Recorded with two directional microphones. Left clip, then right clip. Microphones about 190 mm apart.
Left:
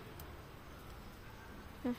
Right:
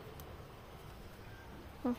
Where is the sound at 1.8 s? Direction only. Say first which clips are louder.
Right 3 dB; 5° right (ahead or behind).